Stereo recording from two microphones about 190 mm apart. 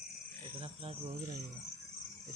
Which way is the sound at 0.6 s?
35° right (ahead or behind).